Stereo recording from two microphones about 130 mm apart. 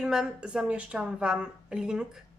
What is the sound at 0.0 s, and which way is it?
A woman's voice, 5° right (ahead or behind).